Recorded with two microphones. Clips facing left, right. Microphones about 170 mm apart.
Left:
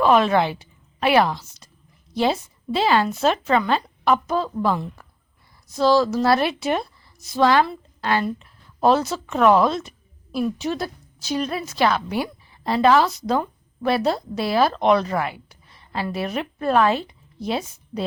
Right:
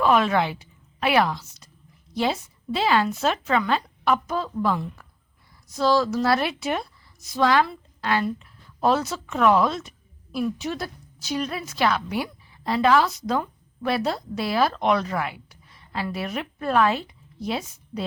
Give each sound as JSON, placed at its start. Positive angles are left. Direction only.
{"t": 0.0, "sound": "a woman's voice", "side_deg": 30}